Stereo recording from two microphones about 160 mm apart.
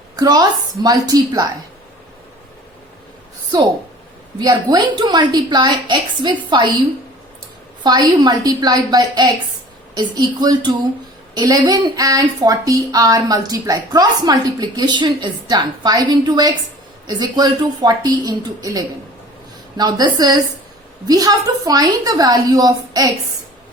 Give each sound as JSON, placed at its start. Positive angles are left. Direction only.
{"t": 0.2, "sound": "speech", "side_deg": -25}
{"t": 4.4, "sound": "speech", "side_deg": -25}
{"t": 7.9, "sound": "speech", "side_deg": -25}